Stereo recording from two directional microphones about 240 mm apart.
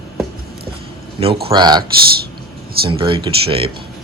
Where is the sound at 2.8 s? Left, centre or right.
Right.